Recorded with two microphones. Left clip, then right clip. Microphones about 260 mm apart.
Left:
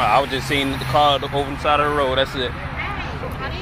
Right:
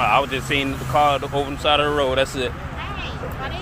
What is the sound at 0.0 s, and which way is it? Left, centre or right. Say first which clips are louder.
Speech: left 1 dB; centre.